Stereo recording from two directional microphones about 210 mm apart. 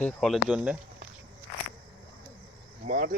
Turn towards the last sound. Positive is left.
turn(degrees=-40)  # may be behind; listen again after turning